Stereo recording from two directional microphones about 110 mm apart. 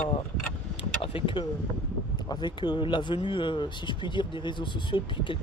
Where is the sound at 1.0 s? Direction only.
50° left (ahead or behind).